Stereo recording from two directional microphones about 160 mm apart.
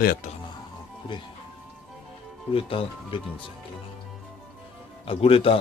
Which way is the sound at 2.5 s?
35° left (ahead or behind).